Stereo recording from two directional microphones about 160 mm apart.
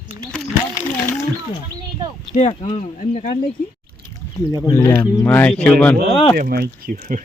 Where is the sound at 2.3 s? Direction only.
45° left (ahead or behind).